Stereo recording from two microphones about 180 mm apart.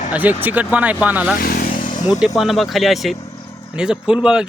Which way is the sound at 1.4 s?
55° left (ahead or behind).